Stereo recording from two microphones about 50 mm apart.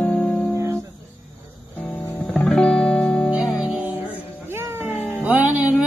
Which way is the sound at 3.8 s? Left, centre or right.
Right.